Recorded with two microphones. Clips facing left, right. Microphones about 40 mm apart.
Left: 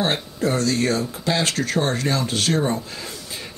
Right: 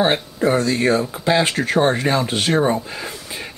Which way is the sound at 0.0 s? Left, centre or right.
Right.